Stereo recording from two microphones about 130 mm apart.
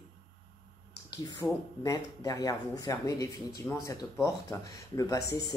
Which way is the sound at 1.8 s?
30° left (ahead or behind).